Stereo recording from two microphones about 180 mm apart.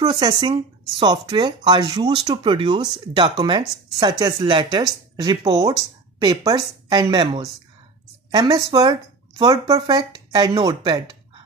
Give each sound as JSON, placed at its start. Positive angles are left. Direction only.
{"t": 0.0, "sound": "speech", "side_deg": -25}